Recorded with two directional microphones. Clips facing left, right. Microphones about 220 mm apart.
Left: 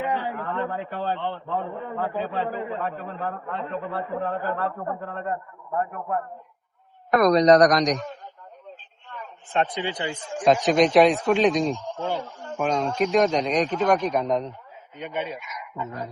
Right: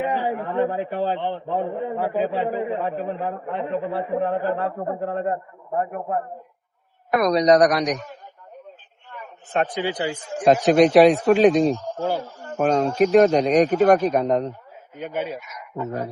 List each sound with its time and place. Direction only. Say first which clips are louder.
0.0 s a man's voice: right 4 dB; 15° right (ahead or behind)
7.1 s a man's voice: left 1 dB; 10° right (ahead or behind)